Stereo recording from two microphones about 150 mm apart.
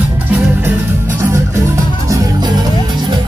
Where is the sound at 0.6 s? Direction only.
15° right (ahead or behind).